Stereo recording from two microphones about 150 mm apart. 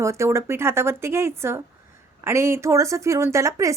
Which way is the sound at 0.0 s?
20° right (ahead or behind).